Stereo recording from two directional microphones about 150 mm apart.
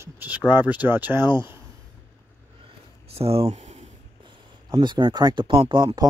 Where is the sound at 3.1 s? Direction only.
40° right (ahead or behind).